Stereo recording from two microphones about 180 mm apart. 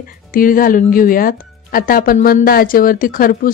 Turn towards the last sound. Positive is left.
turn(degrees=50)  # may be behind; listen again after turning